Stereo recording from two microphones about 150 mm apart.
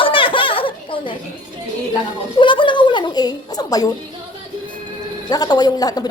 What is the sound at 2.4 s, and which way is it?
Speech, 35° left (ahead or behind).